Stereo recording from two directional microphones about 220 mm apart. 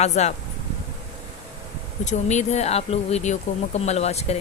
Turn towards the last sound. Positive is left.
turn(degrees=30)  # may be behind; listen again after turning